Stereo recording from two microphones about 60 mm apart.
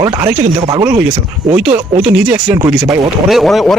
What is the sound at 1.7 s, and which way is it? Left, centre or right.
Speech, centre.